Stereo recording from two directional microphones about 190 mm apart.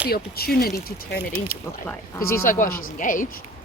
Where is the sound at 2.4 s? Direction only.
45° left (ahead or behind).